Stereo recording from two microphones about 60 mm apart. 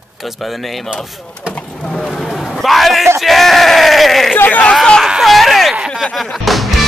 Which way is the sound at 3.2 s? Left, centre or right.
Centre.